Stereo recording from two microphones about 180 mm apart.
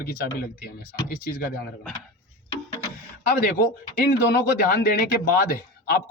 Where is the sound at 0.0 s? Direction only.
60° left (ahead or behind).